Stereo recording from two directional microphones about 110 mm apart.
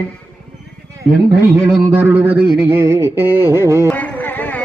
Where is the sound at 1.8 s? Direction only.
20° right (ahead or behind).